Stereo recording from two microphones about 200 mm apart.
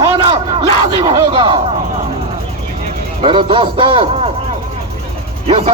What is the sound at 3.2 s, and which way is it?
Speech, 25° right (ahead or behind).